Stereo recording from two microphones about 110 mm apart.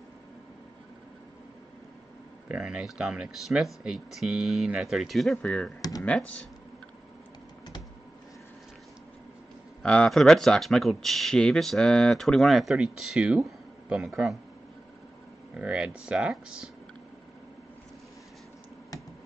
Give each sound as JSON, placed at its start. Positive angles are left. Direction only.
{"t": 2.4, "sound": "speech", "side_deg": -10}
{"t": 5.4, "sound": "speech", "side_deg": 10}
{"t": 5.8, "sound": "computer keyboard", "side_deg": 35}
{"t": 9.8, "sound": "speech", "side_deg": 5}
{"t": 15.5, "sound": "speech", "side_deg": -10}